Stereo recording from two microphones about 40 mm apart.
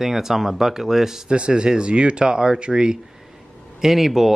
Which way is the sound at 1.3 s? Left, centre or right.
Right.